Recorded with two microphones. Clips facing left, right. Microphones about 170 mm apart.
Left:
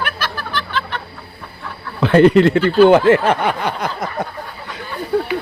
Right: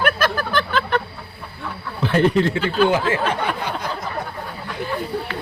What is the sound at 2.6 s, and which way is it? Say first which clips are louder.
Speech: left 8 dB; 60° left (ahead or behind).